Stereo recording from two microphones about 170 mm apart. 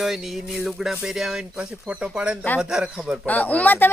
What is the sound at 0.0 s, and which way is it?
Speech, centre (ahead or behind).